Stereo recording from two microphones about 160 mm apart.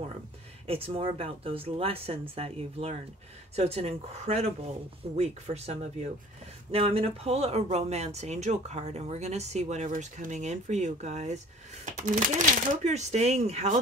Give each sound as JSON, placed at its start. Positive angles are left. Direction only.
{"t": 0.7, "sound": "speech", "side_deg": -35}